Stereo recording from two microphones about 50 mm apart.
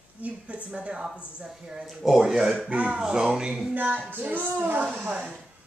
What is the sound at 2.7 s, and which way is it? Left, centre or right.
Speech, right.